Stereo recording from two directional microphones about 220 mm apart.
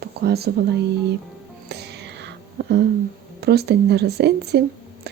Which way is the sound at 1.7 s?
50° right (ahead or behind).